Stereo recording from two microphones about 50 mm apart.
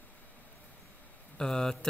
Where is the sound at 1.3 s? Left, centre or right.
Centre.